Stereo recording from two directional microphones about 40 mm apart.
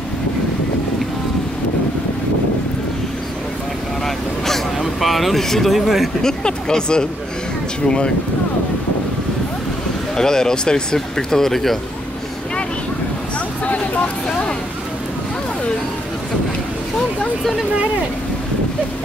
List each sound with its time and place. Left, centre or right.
4.7 s a sound: centre
5.4 s speech: centre
6.2 s speech: centre
10.1 s speech: centre
13.7 s vehicle: left